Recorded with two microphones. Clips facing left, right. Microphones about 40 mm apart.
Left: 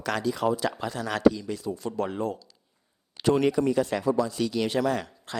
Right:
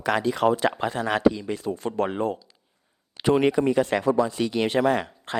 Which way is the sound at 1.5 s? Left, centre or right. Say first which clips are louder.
Right 4 dB; right.